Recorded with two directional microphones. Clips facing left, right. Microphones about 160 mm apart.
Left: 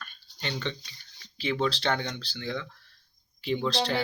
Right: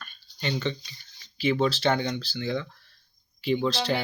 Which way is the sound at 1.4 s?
5° right (ahead or behind).